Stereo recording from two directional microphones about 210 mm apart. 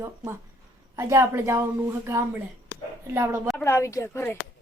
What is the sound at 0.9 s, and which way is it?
Speech, 10° right (ahead or behind).